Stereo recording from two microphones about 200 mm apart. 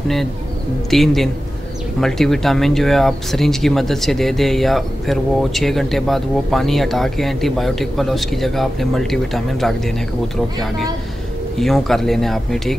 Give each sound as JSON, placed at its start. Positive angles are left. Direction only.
{"t": 0.8, "sound": "speech", "side_deg": 0}